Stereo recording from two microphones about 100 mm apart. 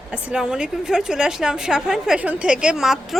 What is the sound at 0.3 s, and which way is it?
A woman's voice, 10° right (ahead or behind).